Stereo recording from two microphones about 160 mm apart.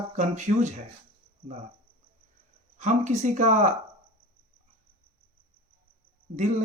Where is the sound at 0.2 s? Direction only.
50° right (ahead or behind).